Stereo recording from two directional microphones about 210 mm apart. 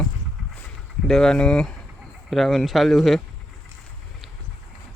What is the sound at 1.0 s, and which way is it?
Speech, 5° left (ahead or behind).